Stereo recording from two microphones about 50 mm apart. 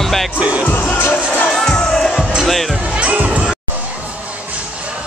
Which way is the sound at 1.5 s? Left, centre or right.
Centre.